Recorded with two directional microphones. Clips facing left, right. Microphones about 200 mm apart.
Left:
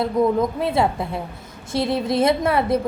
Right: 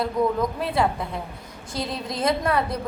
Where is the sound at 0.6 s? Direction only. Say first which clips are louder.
Left 3 dB; 25° left (ahead or behind).